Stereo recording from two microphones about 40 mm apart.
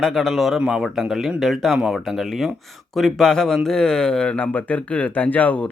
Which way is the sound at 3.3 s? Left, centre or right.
Centre.